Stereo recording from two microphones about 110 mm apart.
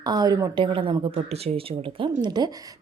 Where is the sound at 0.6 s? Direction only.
50° right (ahead or behind).